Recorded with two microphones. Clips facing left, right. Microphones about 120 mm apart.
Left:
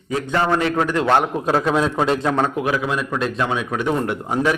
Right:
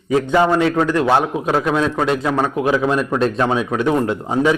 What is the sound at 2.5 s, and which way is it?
A man's voice, 25° right (ahead or behind).